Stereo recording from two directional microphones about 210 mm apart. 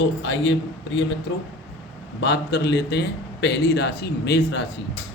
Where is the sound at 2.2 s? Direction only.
55° left (ahead or behind).